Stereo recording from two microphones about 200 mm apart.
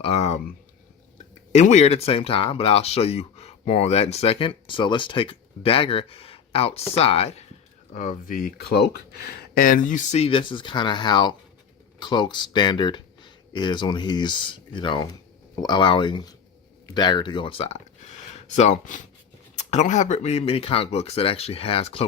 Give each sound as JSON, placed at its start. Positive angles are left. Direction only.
{"t": 0.0, "sound": "speech", "side_deg": 30}
{"t": 1.5, "sound": "speech", "side_deg": 35}